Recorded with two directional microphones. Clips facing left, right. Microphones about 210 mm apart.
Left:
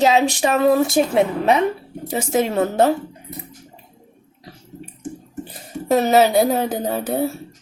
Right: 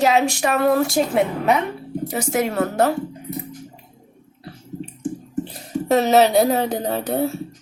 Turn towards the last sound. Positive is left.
turn(degrees=0)  # may be behind; listen again after turning